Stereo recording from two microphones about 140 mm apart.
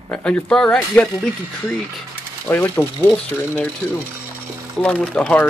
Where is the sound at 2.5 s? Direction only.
15° left (ahead or behind).